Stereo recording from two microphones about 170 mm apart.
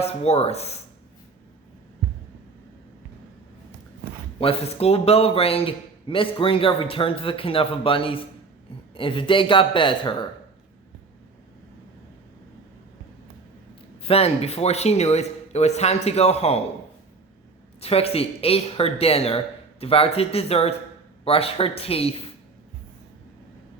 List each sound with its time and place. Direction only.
0.0 s speech: 40° left (ahead or behind)
4.4 s a man's voice: 35° left (ahead or behind)
14.0 s a man's voice: 35° left (ahead or behind)
17.7 s a man's voice: 35° left (ahead or behind)